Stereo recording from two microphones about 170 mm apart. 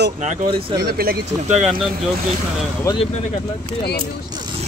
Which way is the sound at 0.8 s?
60° right (ahead or behind).